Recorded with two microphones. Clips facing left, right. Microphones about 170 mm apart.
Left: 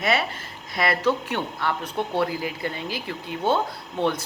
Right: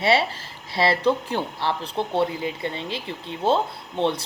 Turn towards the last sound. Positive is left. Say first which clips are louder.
# right 1 dB
turn(degrees=-25)  # may be behind; listen again after turning